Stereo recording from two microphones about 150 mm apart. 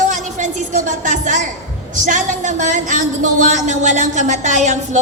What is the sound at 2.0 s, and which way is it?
A woman's voice, 55° right (ahead or behind).